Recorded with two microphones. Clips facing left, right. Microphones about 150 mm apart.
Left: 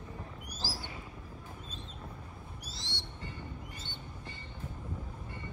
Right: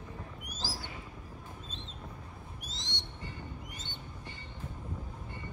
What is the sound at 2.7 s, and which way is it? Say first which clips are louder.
Owl: right 1 dB; 20° right (ahead or behind).